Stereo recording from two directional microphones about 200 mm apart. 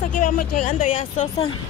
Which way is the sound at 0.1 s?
40° left (ahead or behind).